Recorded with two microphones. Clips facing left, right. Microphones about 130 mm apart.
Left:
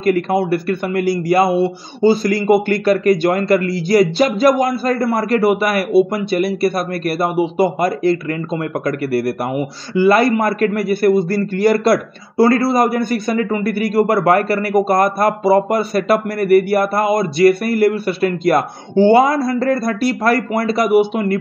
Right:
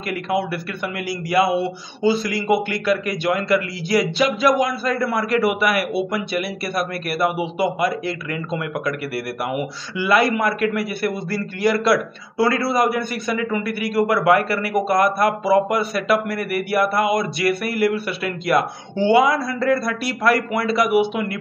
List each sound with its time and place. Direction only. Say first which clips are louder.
0.0 s speech: left 7 dB; 40° left (ahead or behind)